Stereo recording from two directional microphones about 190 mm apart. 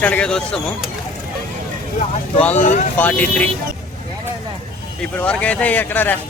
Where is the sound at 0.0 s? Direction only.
5° left (ahead or behind).